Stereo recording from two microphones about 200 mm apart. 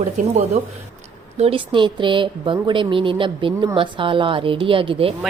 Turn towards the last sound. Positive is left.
turn(degrees=-25)  # may be behind; listen again after turning